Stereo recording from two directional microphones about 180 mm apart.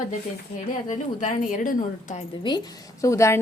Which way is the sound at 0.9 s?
45° left (ahead or behind).